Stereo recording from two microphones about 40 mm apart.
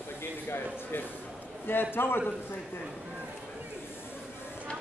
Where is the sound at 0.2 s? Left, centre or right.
Left.